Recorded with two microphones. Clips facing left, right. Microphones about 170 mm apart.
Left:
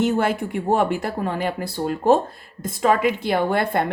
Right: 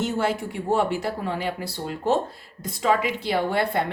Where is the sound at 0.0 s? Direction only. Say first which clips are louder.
Left 4 dB; 55° left (ahead or behind).